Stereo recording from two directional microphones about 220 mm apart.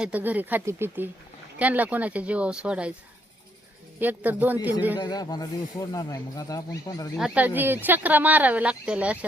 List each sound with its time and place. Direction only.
0.0 s speech: 5° right (ahead or behind)
4.0 s speech: 10° right (ahead or behind)
4.9 s speech: 20° left (ahead or behind)
7.2 s speech: 5° right (ahead or behind)